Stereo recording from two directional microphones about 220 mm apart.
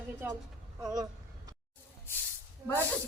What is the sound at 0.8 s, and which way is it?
Speech, 15° right (ahead or behind).